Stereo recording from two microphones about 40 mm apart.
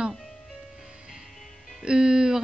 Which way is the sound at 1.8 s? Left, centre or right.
Right.